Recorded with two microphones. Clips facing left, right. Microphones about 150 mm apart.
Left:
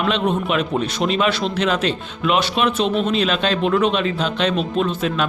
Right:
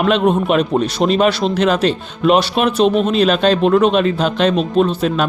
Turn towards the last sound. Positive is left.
turn(degrees=-40)  # may be behind; listen again after turning